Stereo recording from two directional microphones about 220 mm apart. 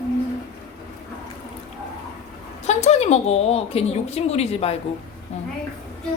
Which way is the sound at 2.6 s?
30° left (ahead or behind).